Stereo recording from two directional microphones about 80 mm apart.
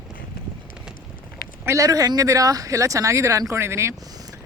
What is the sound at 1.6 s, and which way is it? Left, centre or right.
Speech, right.